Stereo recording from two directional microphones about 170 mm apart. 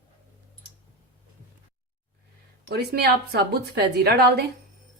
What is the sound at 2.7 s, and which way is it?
Speech, 70° right (ahead or behind).